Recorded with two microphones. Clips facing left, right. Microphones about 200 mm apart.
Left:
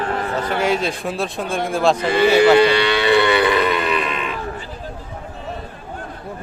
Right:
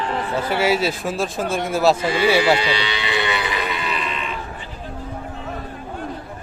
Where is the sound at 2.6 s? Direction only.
55° left (ahead or behind).